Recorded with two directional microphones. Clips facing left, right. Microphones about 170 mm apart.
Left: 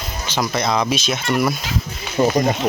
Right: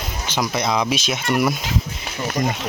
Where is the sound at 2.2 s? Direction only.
65° left (ahead or behind).